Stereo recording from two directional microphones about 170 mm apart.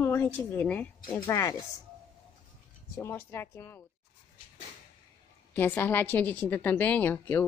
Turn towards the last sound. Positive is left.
turn(degrees=10)  # may be behind; listen again after turning